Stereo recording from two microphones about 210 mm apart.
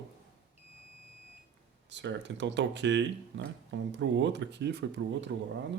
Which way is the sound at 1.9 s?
60° right (ahead or behind).